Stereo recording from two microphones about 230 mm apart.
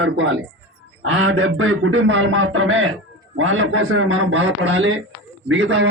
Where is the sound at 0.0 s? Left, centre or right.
Right.